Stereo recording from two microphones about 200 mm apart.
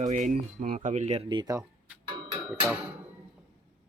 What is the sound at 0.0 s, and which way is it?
Speech, 40° right (ahead or behind).